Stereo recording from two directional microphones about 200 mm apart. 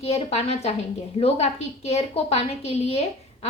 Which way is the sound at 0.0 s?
30° left (ahead or behind).